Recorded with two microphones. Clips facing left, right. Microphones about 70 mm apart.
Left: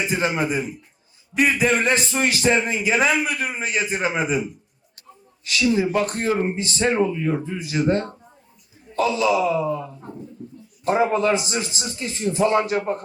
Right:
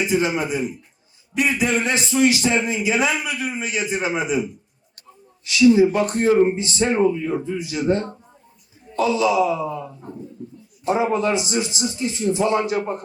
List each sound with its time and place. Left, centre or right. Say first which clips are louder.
0.1 s a man's voice: right 1 dB; left
5.5 s a man's voice: right 6 dB; left
9.3 s a man's voice: right 1 dB; left
10.8 s a man's voice: left 1 dB; left